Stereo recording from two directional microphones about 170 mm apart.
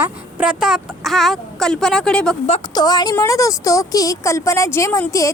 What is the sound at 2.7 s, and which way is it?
A woman's voice, 25° left (ahead or behind).